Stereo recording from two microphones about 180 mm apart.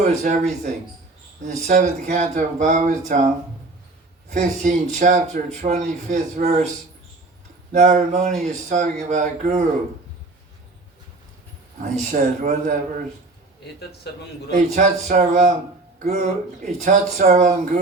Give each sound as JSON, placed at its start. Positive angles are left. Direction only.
{"t": 0.0, "sound": "speech", "side_deg": -40}
{"t": 7.7, "sound": "speech", "side_deg": -40}
{"t": 12.1, "sound": "speech", "side_deg": -40}
{"t": 13.7, "sound": "a man's voice", "side_deg": 65}
{"t": 14.5, "sound": "speech", "side_deg": -40}